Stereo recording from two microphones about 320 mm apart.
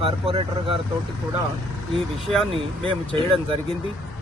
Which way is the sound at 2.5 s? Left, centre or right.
Centre.